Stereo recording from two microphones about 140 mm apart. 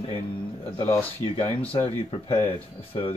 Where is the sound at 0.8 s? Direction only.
15° left (ahead or behind).